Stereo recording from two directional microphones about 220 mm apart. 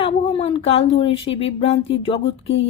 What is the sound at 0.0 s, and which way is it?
Speech, 25° left (ahead or behind).